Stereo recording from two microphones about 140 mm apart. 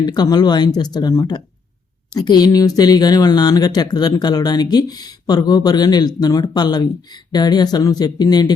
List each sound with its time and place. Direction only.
0.0 s speech: 30° left (ahead or behind)